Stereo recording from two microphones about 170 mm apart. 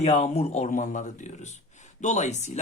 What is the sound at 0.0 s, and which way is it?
Speech, 40° left (ahead or behind).